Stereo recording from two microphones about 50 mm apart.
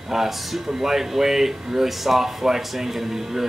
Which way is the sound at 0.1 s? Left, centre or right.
Centre.